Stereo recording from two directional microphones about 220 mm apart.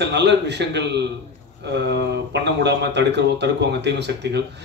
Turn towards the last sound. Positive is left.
turn(degrees=-50)  # may be behind; listen again after turning